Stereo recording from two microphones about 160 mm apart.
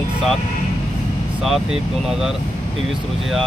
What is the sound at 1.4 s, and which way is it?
Speech, centre (ahead or behind).